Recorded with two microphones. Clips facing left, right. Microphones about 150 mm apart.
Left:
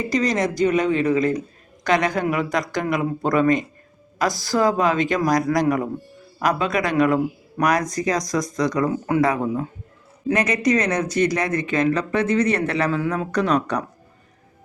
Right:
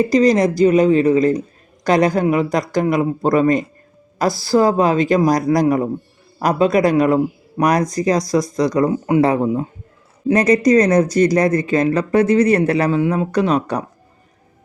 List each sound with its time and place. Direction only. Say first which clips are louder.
0.0 s speech: right 8 dB; 35° right (ahead or behind)